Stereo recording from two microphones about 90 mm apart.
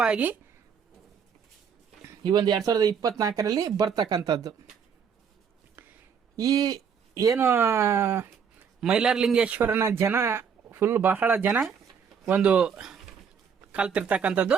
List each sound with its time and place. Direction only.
0.0 s speech: 15° right (ahead or behind)
2.2 s speech: 55° right (ahead or behind)
3.8 s speech: 50° right (ahead or behind)
6.3 s speech: 40° right (ahead or behind)
7.3 s a man's voice: 25° right (ahead or behind)
8.8 s a man's voice: 5° right (ahead or behind)